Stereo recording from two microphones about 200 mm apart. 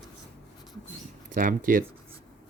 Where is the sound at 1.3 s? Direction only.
45° right (ahead or behind).